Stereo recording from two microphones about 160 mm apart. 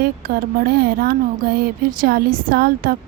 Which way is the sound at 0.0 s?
70° right (ahead or behind).